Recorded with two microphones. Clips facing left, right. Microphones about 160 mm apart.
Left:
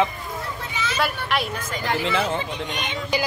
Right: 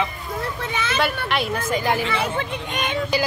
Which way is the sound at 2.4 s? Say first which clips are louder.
Right 2 dB; 50° right (ahead or behind).